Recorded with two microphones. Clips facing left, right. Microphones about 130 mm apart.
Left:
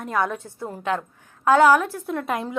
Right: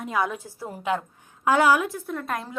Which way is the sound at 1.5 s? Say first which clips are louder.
Left 4 dB; 45° left (ahead or behind).